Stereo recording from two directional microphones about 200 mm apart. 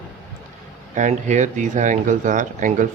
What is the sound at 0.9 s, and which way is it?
Speech, 35° right (ahead or behind).